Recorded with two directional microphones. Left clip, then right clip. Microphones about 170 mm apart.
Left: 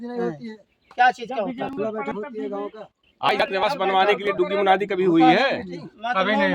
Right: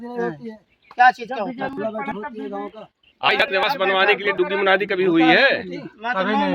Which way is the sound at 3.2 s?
90° left.